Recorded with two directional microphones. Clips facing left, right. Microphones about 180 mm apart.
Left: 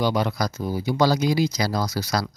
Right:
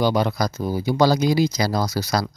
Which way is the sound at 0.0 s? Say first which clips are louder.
Right 3 dB; 40° right (ahead or behind).